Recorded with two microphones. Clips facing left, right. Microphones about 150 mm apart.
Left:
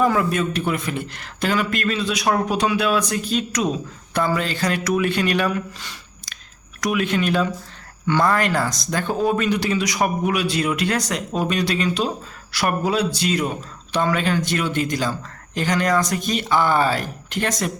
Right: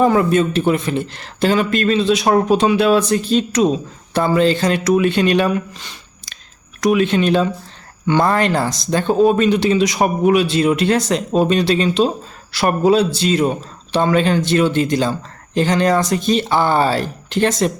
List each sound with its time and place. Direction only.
0.0 s speech: 30° right (ahead or behind)